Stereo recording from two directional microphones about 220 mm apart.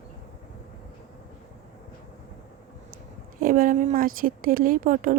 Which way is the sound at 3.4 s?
40° right (ahead or behind).